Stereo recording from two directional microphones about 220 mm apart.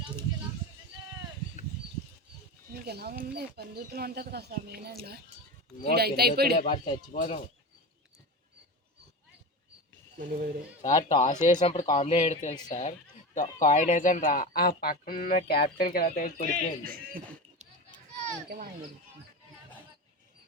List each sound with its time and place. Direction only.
2.8 s speech: 45° right (ahead or behind)
6.6 s speech: 25° left (ahead or behind)
10.2 s a child's voice: 35° right (ahead or behind)
11.1 s speech: 30° left (ahead or behind)
16.8 s a sound: 40° right (ahead or behind)